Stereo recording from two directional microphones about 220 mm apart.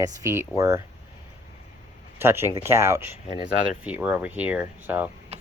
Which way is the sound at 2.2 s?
10° right (ahead or behind).